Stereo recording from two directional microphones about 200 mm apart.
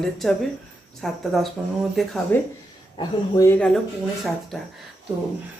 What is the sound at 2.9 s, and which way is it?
Speech, 20° left (ahead or behind).